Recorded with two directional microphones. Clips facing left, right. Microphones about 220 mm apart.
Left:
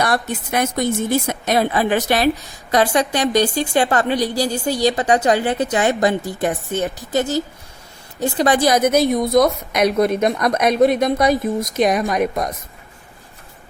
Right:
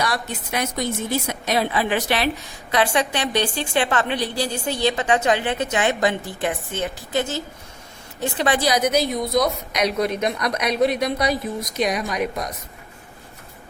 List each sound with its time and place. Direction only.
0.0 s a woman's voice: 50° left (ahead or behind)